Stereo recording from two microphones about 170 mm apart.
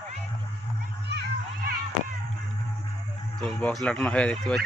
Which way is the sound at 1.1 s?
85° right.